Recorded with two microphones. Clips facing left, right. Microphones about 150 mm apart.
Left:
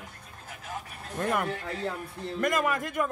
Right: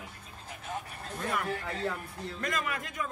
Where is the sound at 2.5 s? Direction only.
50° left (ahead or behind).